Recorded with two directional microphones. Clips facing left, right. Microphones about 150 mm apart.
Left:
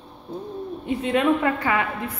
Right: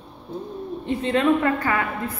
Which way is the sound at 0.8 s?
10° left (ahead or behind).